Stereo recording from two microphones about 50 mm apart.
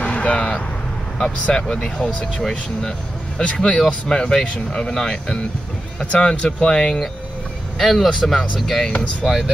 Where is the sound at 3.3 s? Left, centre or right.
Centre.